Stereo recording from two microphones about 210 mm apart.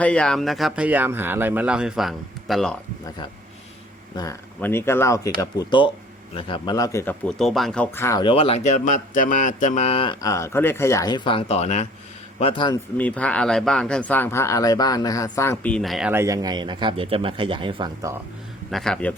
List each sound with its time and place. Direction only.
0.0 s speech: 5° left (ahead or behind)
4.1 s speech: 15° left (ahead or behind)
13.0 s speech: 5° left (ahead or behind); by 18.1 s 20° right (ahead or behind)
18.7 s speech: centre (ahead or behind)